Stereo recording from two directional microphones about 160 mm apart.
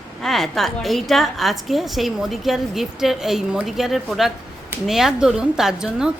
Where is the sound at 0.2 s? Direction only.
Centre (ahead or behind).